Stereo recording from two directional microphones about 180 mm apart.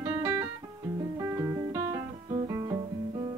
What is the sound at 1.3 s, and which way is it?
Music, 15° right (ahead or behind).